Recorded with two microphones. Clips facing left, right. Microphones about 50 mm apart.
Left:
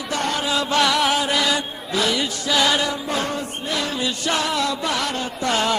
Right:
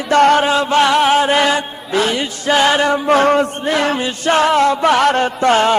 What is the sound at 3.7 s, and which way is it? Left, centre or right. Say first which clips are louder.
Music: right 4 dB; right.